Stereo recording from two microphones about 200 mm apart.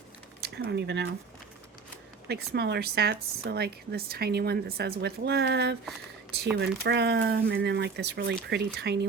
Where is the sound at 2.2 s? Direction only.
55° right (ahead or behind).